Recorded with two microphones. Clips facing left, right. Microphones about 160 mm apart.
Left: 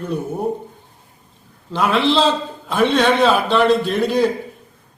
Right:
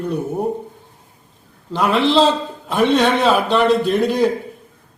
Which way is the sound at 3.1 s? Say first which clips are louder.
Even; centre (ahead or behind).